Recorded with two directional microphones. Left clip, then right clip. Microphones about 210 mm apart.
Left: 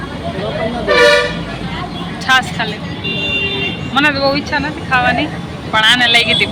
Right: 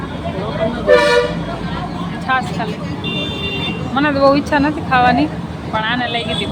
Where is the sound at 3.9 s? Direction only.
15° right (ahead or behind).